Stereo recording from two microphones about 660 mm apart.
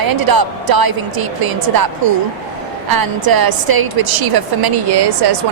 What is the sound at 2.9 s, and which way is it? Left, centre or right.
A woman's voice, right.